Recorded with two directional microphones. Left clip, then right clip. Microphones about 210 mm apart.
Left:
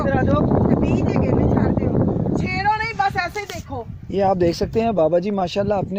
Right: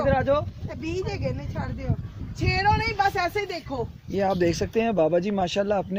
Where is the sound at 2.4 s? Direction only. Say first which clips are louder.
Even; 55° right (ahead or behind).